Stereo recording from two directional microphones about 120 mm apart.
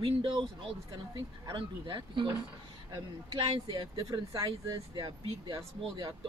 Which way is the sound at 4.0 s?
30° right (ahead or behind).